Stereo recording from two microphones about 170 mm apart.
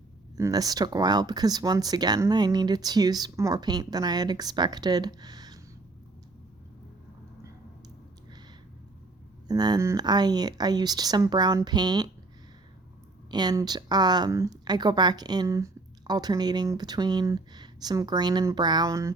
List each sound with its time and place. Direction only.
0.3 s speech: 20° right (ahead or behind)
9.5 s speech: 25° right (ahead or behind)
13.3 s speech: 25° right (ahead or behind)